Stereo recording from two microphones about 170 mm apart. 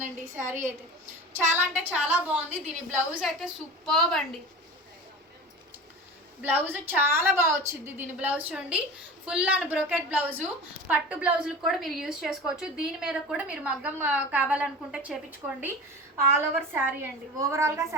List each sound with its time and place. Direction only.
0.0 s a woman's voice: 15° right (ahead or behind); by 4.2 s centre (ahead or behind)
6.4 s a woman's voice: 10° right (ahead or behind)